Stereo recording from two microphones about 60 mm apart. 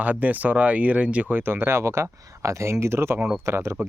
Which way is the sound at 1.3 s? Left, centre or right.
Right.